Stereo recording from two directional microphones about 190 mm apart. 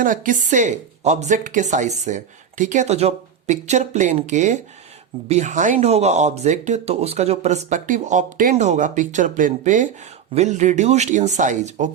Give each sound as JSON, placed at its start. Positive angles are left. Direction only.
{"t": 0.0, "sound": "speech", "side_deg": -45}